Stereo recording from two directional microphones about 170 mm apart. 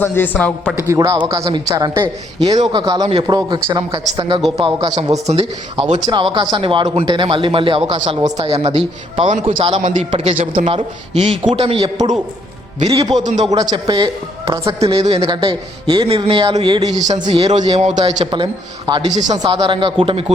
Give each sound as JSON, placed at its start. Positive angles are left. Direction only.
{"t": 0.0, "sound": "speech", "side_deg": 10}
{"t": 0.8, "sound": "a man's voice", "side_deg": -15}
{"t": 5.3, "sound": "a man's voice", "side_deg": -30}
{"t": 9.4, "sound": "speech", "side_deg": -30}
{"t": 9.7, "sound": "a man's voice", "side_deg": -45}
{"t": 10.1, "sound": "speech", "side_deg": -30}
{"t": 13.1, "sound": "a man's voice", "side_deg": -45}
{"t": 13.5, "sound": "speech", "side_deg": -25}
{"t": 14.8, "sound": "speech", "side_deg": -35}
{"t": 15.3, "sound": "speech", "side_deg": -25}
{"t": 17.5, "sound": "a man's voice", "side_deg": -40}
{"t": 18.9, "sound": "speech", "side_deg": -25}
{"t": 19.1, "sound": "a man's voice", "side_deg": -45}
{"t": 19.4, "sound": "speech", "side_deg": -25}